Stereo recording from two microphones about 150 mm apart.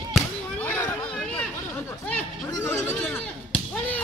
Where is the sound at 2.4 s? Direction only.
15° left (ahead or behind).